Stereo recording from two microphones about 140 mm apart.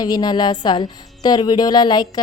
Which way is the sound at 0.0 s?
30° left (ahead or behind).